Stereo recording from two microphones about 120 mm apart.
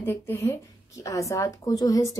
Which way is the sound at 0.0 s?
20° left (ahead or behind).